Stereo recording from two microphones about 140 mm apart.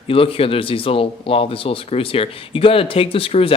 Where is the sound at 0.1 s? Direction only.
40° left (ahead or behind).